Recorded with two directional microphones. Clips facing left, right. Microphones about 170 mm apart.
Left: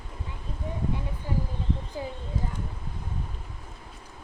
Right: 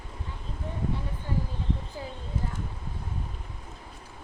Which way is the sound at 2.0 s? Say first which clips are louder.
Left 4 dB; 20° left (ahead or behind).